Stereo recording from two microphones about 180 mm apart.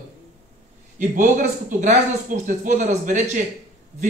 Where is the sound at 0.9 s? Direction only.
45° right (ahead or behind).